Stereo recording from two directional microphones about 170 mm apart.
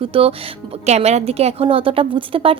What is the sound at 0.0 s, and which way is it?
A woman's voice, 35° right (ahead or behind).